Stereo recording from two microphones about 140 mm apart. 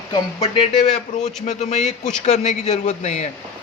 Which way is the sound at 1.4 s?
55° left (ahead or behind).